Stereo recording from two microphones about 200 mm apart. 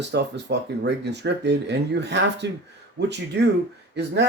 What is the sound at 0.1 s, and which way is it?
Speech, 60° right (ahead or behind).